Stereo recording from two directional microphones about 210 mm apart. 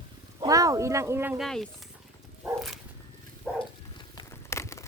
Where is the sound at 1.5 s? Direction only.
Centre (ahead or behind).